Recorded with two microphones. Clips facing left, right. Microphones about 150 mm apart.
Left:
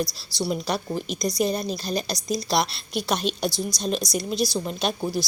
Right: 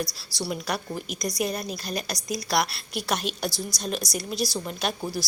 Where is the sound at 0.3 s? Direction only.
25° left (ahead or behind).